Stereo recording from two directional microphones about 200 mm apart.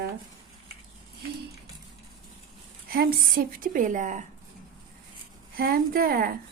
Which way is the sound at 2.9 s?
45° right (ahead or behind).